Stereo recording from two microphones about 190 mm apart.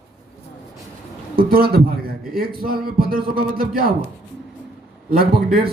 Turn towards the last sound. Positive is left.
turn(degrees=-55)  # may be behind; listen again after turning